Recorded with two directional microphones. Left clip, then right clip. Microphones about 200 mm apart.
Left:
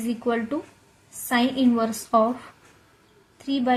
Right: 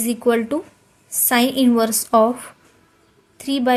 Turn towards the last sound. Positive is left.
turn(degrees=-45)  # may be behind; listen again after turning